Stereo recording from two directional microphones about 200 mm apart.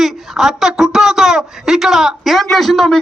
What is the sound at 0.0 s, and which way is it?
Speech, centre (ahead or behind).